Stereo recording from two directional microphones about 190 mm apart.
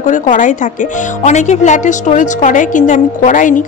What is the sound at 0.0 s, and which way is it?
Speech, 45° left (ahead or behind).